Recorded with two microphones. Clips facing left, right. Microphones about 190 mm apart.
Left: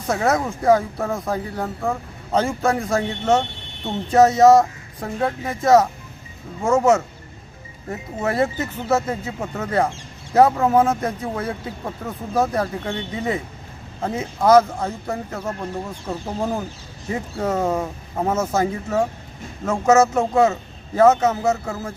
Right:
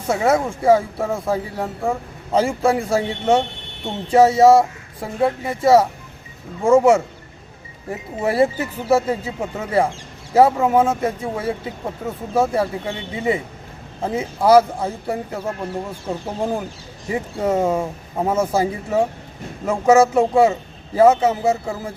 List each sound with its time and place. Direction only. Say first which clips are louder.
0.1 s speech: right 2 dB; 10° right (ahead or behind)